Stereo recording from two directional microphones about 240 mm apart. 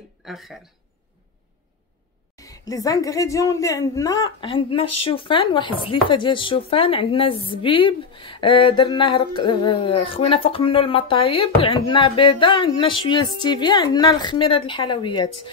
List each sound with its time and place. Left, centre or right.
0.2 s speech: centre
2.3 s a woman's voice: centre